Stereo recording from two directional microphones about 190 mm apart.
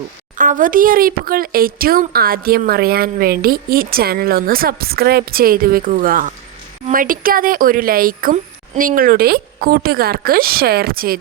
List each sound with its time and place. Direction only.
0.3 s a woman's voice: 45° right (ahead or behind)